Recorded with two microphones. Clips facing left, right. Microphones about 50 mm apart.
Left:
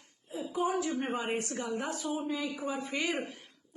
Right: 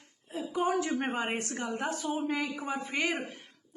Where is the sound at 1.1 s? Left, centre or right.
Right.